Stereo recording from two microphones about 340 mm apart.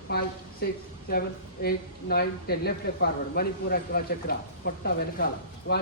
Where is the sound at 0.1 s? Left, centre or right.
Left.